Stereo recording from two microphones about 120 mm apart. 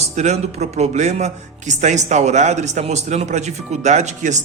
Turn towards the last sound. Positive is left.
turn(degrees=-80)